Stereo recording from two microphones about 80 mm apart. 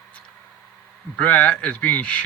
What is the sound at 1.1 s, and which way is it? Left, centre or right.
Speech, centre.